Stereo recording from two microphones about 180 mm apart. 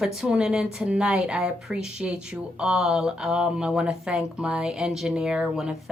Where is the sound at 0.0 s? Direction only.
5° right (ahead or behind).